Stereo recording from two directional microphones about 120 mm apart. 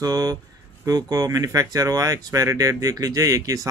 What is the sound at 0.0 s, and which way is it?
Speech, 30° right (ahead or behind).